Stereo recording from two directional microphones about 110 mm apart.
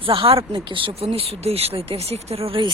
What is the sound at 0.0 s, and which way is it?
Speech, 55° right (ahead or behind).